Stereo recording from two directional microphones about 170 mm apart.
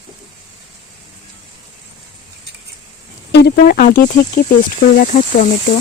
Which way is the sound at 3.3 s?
80° left.